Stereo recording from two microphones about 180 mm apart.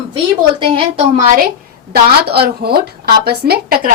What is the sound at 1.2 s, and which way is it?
Speech, 45° right (ahead or behind).